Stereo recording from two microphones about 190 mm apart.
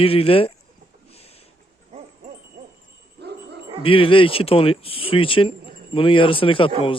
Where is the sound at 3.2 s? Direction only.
60° right (ahead or behind).